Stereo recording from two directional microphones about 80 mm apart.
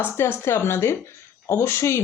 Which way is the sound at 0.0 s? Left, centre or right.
Left.